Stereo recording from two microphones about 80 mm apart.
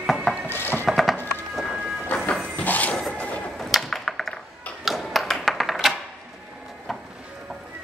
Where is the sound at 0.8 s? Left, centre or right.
Centre.